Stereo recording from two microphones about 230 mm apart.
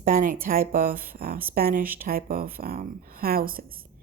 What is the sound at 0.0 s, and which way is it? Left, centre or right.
A woman's voice, right.